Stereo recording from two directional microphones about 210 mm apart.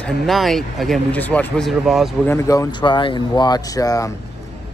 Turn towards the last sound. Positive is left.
turn(degrees=15)  # may be behind; listen again after turning